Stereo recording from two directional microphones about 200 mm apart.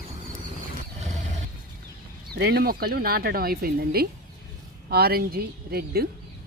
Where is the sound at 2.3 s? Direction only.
55° right (ahead or behind).